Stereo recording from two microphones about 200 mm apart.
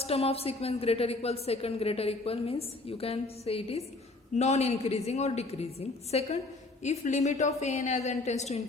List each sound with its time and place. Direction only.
0.0 s a woman's voice: 30° left (ahead or behind)